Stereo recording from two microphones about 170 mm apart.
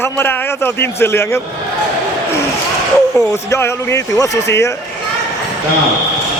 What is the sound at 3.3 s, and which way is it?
A man's voice, 15° left (ahead or behind).